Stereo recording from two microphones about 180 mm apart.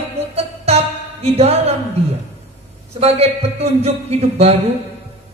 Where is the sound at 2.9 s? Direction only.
35° right (ahead or behind).